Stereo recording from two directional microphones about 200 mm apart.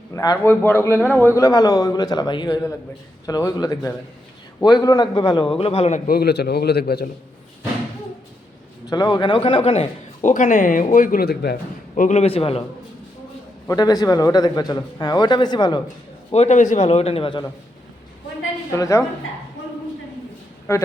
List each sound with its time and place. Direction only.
0.1 s a man's voice: 15° left (ahead or behind)
1.4 s a man's voice: 20° left (ahead or behind)
6.1 s a man's voice: 50° left (ahead or behind)
8.9 s a man's voice: 20° left (ahead or behind)
10.2 s speech: 40° left (ahead or behind)
11.9 s speech: 35° left (ahead or behind)
13.7 s a man's voice: 20° left (ahead or behind)
16.3 s speech: 35° left (ahead or behind)
18.7 s a man's voice: 15° left (ahead or behind)
20.7 s a man's voice: 15° left (ahead or behind)